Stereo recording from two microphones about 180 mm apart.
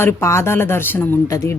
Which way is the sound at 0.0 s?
15° left (ahead or behind).